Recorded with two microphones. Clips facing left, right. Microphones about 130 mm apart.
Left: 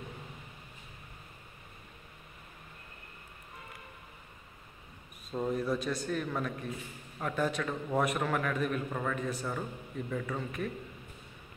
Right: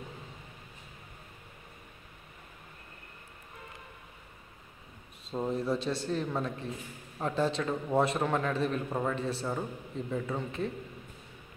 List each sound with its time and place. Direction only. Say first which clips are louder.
5.4 s a man's voice: right 1 dB; 25° right (ahead or behind)